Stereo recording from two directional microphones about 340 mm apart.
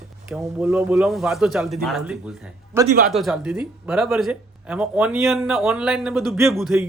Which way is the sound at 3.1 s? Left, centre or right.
Centre.